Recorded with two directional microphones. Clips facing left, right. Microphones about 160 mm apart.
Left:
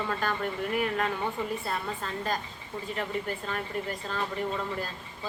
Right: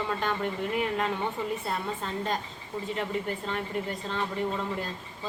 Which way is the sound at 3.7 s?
20° right (ahead or behind).